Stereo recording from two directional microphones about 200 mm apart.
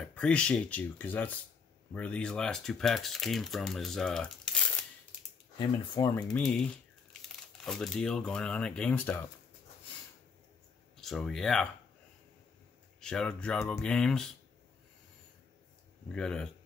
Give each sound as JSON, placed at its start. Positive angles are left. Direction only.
{"t": 0.0, "sound": "speech", "side_deg": 5}
{"t": 5.6, "sound": "speech", "side_deg": 20}
{"t": 6.2, "sound": "speech", "side_deg": 0}
{"t": 11.0, "sound": "speech", "side_deg": 0}
{"t": 13.0, "sound": "speech", "side_deg": 5}
{"t": 16.1, "sound": "speech", "side_deg": 5}